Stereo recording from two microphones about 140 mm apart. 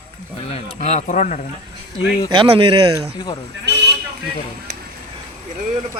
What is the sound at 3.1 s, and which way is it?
Speech, 35° left (ahead or behind).